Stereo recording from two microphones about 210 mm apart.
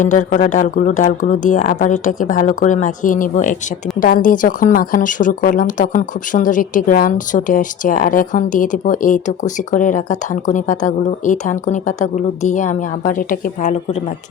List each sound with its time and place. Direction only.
0.0 s speech: 35° left (ahead or behind)